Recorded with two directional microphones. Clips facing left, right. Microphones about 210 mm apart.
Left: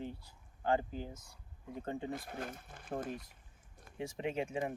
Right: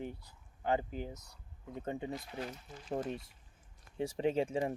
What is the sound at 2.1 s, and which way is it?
Speech, 50° left (ahead or behind).